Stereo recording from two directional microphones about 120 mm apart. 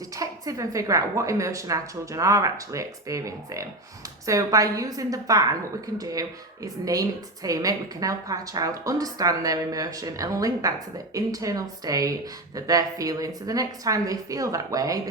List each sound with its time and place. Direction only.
0.1 s a woman's voice: 30° right (ahead or behind)